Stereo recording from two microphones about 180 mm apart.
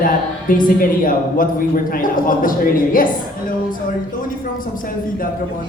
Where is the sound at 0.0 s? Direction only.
50° left (ahead or behind).